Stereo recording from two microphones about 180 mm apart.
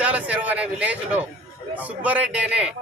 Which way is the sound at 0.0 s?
10° right (ahead or behind).